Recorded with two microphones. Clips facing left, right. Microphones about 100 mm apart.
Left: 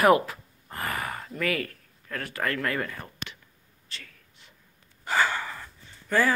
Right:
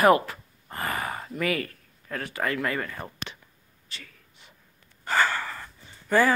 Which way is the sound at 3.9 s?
5° right (ahead or behind).